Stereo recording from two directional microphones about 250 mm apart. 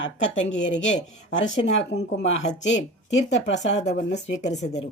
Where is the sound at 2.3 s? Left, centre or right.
Left.